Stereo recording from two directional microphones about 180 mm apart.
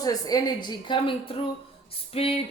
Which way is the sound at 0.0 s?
20° left (ahead or behind).